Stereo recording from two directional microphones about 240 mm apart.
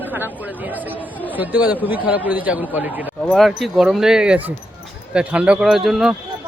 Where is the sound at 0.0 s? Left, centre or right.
Centre.